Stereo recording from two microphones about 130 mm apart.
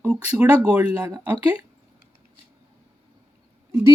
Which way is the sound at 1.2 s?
10° right (ahead or behind).